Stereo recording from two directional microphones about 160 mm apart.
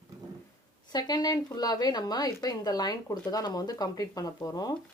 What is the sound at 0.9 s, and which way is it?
Speech, 25° left (ahead or behind).